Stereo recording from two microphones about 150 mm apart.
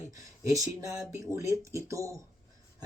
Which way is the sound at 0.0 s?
20° right (ahead or behind).